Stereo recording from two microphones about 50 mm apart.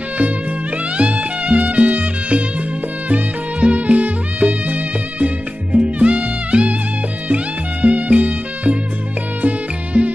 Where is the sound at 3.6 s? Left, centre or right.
Right.